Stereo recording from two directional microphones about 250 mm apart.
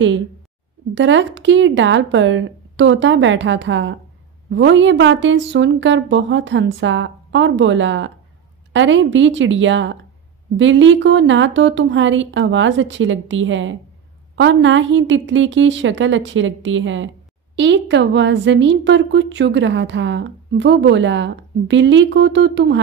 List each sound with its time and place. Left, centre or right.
0.9 s a woman's voice: right